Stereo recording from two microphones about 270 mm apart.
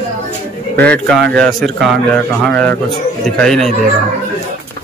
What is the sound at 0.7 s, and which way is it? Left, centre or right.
Speech, centre.